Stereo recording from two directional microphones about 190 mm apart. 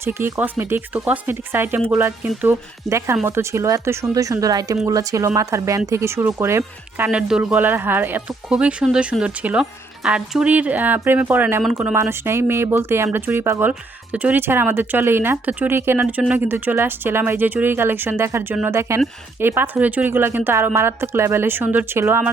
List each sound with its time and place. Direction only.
0.0 s speech: 15° right (ahead or behind)